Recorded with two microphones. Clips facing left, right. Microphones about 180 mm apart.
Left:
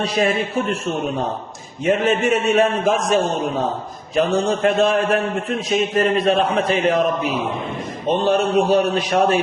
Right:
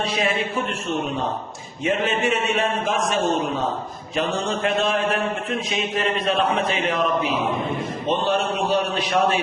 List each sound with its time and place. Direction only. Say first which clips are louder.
0.0 s a man's voice: left 4 dB; 40° left (ahead or behind)
1.8 s a man's voice: left 4 dB; 45° left (ahead or behind)
8.3 s a man's voice: left 8 dB; 45° left (ahead or behind)